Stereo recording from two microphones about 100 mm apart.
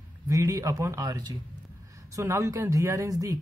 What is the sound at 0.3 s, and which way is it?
A man's voice, 35° right (ahead or behind).